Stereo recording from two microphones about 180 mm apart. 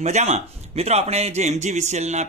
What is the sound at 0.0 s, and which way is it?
Speech, 40° right (ahead or behind).